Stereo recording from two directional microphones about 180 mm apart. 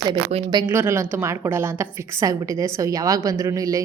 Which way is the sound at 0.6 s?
10° right (ahead or behind).